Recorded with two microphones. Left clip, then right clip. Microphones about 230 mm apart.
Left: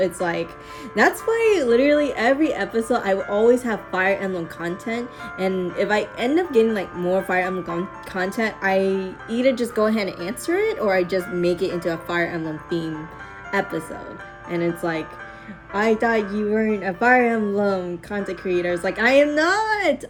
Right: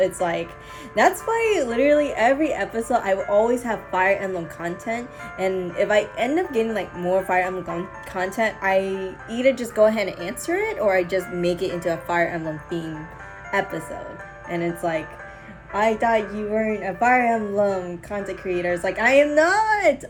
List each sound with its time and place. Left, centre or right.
0.0 s a woman's voice: centre